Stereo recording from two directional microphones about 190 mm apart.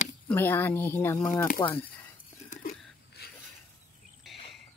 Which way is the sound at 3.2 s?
55° left (ahead or behind).